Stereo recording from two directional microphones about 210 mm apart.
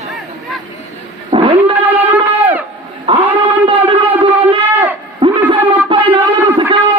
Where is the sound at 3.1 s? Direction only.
25° right (ahead or behind).